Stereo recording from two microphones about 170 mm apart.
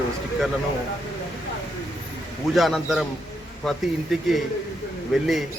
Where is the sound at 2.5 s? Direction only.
Centre (ahead or behind).